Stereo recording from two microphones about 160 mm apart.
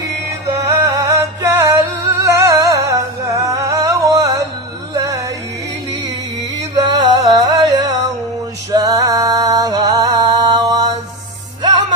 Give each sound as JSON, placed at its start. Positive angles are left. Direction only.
{"t": 0.4, "sound": "music", "side_deg": -20}
{"t": 2.2, "sound": "humming", "side_deg": -20}
{"t": 4.9, "sound": "music", "side_deg": -20}
{"t": 6.6, "sound": "music", "side_deg": -20}